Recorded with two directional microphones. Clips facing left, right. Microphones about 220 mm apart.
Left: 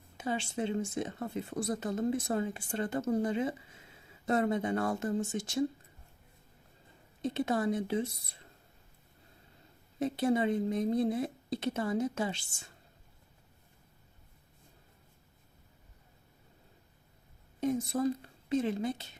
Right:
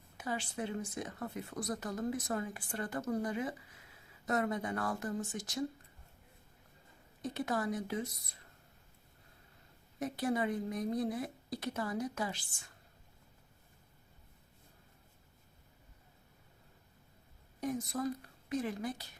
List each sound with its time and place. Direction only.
0.2 s speech: 25° left (ahead or behind)
7.2 s speech: 25° left (ahead or behind)
10.0 s speech: 25° left (ahead or behind)
17.6 s speech: 25° left (ahead or behind)